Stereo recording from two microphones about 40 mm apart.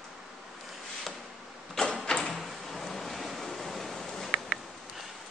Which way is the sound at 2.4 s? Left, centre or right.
Centre.